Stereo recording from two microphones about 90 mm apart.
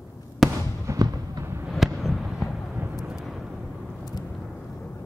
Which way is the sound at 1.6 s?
Centre (ahead or behind).